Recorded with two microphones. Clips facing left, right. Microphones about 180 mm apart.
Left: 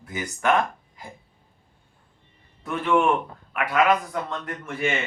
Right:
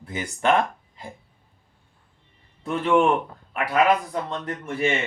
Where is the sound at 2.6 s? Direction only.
25° right (ahead or behind).